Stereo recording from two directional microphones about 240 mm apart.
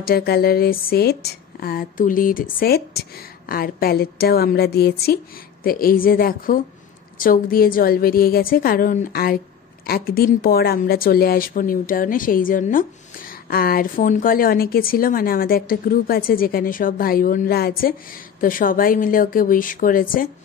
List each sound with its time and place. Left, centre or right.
0.0 s speech: left